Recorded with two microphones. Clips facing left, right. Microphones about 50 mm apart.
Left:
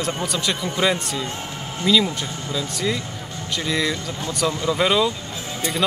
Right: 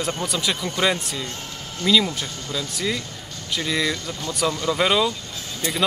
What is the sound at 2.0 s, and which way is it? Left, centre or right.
Speech, centre.